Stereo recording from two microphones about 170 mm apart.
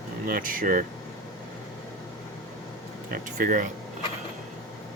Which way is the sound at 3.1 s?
50° right (ahead or behind).